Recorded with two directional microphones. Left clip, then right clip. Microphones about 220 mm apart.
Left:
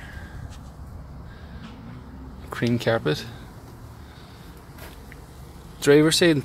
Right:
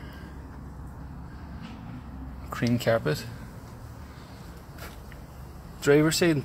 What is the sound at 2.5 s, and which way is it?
Speech, 15° left (ahead or behind).